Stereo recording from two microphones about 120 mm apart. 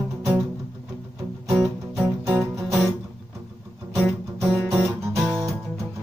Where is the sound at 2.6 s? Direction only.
Centre (ahead or behind).